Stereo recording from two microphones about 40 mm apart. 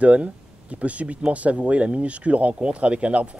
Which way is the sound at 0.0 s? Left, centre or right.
Right.